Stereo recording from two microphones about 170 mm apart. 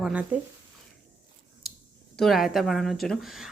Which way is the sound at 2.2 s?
Centre (ahead or behind).